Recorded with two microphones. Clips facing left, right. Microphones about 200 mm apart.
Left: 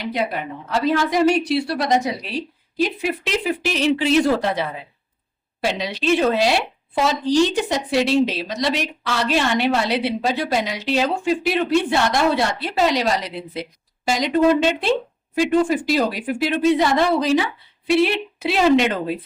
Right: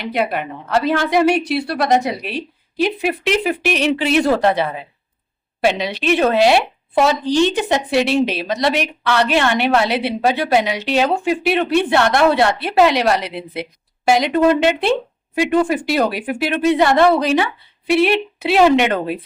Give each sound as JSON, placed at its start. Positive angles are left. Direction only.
{"t": 0.0, "sound": "a woman's voice", "side_deg": -60}